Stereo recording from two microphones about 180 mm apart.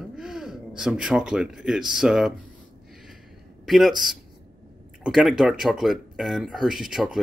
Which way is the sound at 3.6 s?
Centre (ahead or behind).